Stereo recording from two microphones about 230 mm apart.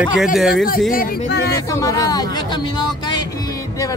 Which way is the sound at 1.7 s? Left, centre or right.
Centre.